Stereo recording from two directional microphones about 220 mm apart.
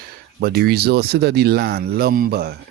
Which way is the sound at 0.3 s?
45° right (ahead or behind).